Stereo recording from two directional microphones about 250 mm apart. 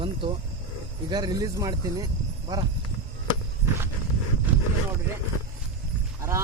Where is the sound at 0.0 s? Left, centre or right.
Centre.